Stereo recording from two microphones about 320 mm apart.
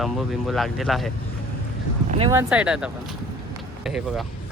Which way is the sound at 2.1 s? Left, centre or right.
Centre.